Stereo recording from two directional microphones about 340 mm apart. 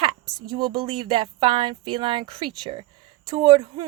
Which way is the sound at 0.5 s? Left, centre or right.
Centre.